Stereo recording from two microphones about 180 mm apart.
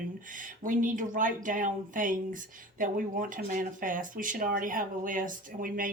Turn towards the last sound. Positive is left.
turn(degrees=-50)  # may be behind; listen again after turning